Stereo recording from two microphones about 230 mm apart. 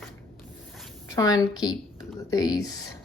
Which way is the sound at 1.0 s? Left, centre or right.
Centre.